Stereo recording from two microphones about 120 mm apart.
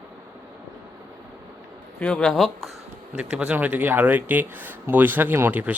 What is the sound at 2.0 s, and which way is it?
Speech, 10° left (ahead or behind).